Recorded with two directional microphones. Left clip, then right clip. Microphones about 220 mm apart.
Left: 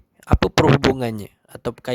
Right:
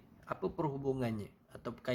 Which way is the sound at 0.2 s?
50° left (ahead or behind).